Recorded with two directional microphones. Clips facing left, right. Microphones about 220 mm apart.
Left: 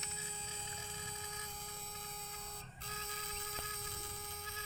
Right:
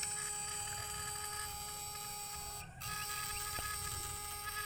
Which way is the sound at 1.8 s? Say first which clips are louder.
Left 2 dB; 55° left (ahead or behind).